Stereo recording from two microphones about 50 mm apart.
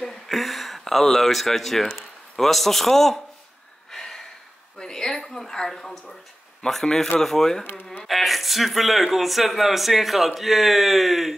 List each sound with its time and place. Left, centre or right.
0.0 s a sound: centre
2.0 s speech: centre
3.9 s gasp: centre
4.7 s speech: centre
7.6 s speech: left
8.0 s speech: centre